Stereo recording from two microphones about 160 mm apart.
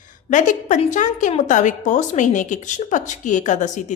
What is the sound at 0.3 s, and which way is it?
A woman's voice, 50° left (ahead or behind).